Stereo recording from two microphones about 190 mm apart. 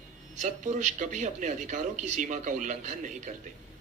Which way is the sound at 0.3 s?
40° right (ahead or behind).